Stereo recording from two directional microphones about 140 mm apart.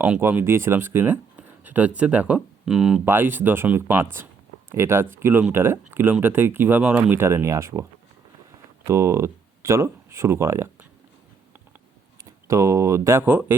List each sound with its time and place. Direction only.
0.0 s speech: 15° right (ahead or behind)
3.0 s speech: 15° right (ahead or behind)
8.9 s speech: 20° right (ahead or behind)
12.5 s speech: 20° right (ahead or behind)